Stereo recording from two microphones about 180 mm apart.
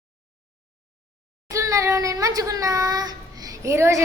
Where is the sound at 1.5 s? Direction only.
20° right (ahead or behind).